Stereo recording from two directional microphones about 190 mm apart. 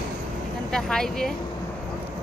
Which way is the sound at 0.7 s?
5° left (ahead or behind).